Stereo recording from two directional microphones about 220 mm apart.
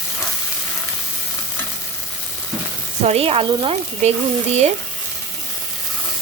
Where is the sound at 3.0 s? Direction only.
25° right (ahead or behind).